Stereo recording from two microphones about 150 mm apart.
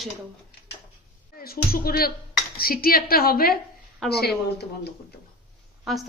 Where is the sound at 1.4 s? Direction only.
80° left.